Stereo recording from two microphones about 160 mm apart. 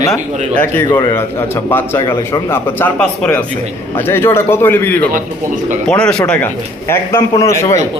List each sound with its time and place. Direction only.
0.1 s a man's voice: 10° left (ahead or behind)
0.9 s a man's voice: 20° left (ahead or behind)